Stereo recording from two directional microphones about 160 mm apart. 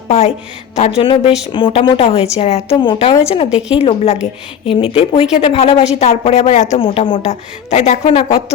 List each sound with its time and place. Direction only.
0.1 s a woman's voice: 45° left (ahead or behind)
2.7 s a woman's voice: 30° left (ahead or behind)
7.3 s speech: 45° left (ahead or behind)